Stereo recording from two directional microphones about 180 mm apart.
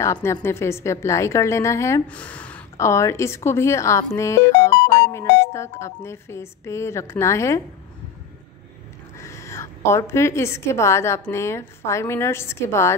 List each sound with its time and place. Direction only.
0.0 s a woman's voice: 15° left (ahead or behind)
9.2 s a woman's voice: 15° left (ahead or behind)